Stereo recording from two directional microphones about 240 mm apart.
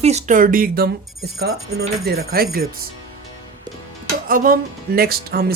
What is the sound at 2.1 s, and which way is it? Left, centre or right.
Speech, right.